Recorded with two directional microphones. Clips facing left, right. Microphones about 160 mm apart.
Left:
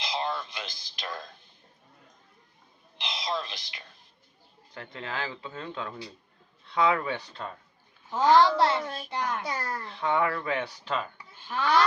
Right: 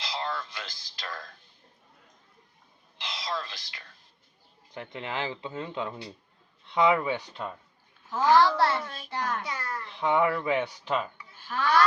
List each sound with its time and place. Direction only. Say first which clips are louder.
0.0 s a sound: left 2 dB; 20° left (ahead or behind)
3.0 s whispering: left 2 dB; 20° left (ahead or behind)
4.7 s speech: right 2 dB; 20° right (ahead or behind)
8.1 s a child's voice: left 1 dB; 20° left (ahead or behind)
9.4 s a child's voice: left 2 dB; 35° left (ahead or behind)
10.0 s speech: right 2 dB; 15° right (ahead or behind)
11.3 s a sound: even; 20° left (ahead or behind)